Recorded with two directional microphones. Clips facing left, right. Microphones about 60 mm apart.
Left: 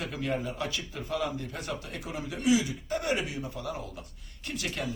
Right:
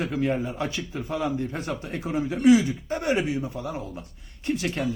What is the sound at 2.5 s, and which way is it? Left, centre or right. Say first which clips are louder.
Speech: right 8 dB; right.